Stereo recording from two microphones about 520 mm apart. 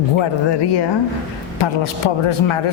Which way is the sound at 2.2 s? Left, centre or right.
Left.